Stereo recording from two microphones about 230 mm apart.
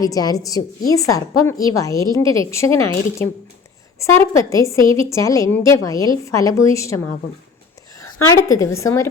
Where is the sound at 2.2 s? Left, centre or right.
Right.